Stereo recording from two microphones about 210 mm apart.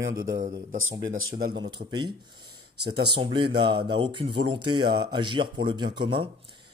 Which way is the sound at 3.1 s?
25° right (ahead or behind).